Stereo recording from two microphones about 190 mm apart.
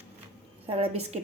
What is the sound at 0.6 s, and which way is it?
Speech, 30° right (ahead or behind).